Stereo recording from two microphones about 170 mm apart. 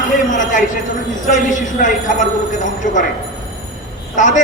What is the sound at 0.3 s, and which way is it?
A man's voice, 50° left (ahead or behind).